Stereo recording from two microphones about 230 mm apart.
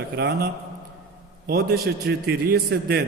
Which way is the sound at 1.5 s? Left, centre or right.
Right.